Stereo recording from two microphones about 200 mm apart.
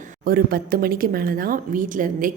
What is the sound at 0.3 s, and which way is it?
A woman's voice, 45° right (ahead or behind).